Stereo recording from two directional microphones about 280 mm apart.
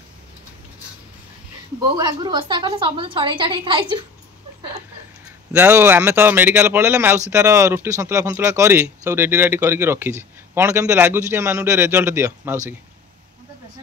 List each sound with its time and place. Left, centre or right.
1.8 s speech: centre
5.5 s speech: centre